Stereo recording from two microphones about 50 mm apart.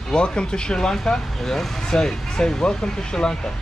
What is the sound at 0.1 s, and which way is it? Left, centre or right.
Speech, centre.